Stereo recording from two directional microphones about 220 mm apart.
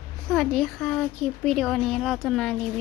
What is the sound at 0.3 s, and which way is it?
Speech, centre (ahead or behind).